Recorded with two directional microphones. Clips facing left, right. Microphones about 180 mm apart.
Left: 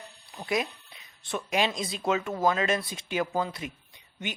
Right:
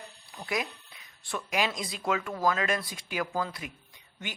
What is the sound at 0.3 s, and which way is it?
Jingle bell, 25° left (ahead or behind).